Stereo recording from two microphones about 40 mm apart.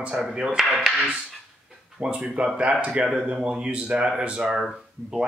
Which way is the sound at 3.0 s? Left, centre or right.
Centre.